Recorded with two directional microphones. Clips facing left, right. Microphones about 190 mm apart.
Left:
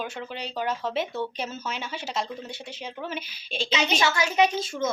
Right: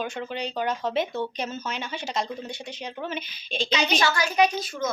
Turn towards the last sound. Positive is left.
turn(degrees=25)  # may be behind; listen again after turning